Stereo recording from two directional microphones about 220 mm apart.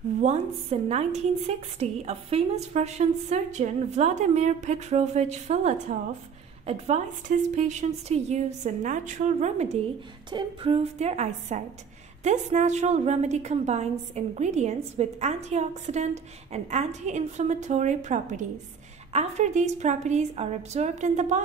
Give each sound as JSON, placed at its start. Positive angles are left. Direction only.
{"t": 0.2, "sound": "a woman's voice", "side_deg": -30}